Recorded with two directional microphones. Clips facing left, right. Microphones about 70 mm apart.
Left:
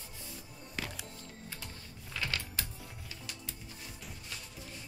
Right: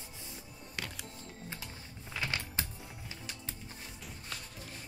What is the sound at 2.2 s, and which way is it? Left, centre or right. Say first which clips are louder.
Music: right 1 dB; right.